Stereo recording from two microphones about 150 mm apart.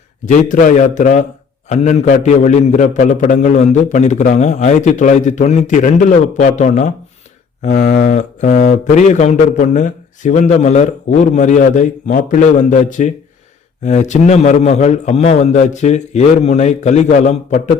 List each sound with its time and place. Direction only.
0.3 s a man's voice: 60° left (ahead or behind)